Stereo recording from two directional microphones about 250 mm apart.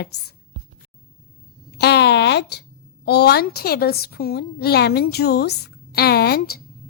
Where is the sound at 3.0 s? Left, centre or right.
Left.